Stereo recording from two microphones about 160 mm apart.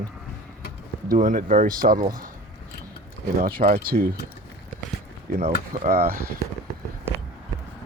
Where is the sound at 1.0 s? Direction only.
60° right (ahead or behind).